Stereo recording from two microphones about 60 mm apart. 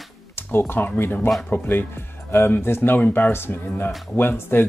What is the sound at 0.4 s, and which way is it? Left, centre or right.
Speech, left.